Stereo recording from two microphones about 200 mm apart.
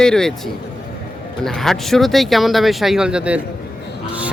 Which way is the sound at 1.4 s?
Centre (ahead or behind).